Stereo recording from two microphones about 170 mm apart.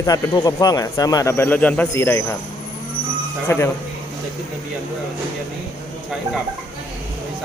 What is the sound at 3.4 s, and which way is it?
Speech, 15° left (ahead or behind).